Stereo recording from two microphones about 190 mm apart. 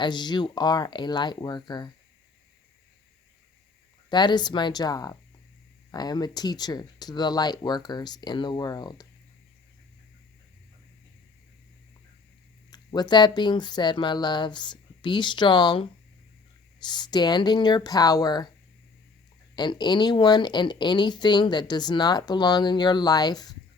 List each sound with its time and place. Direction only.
0.0 s speech: 25° left (ahead or behind)
4.1 s speech: 25° left (ahead or behind)
12.7 s speech: 20° left (ahead or behind)
19.5 s speech: 25° left (ahead or behind)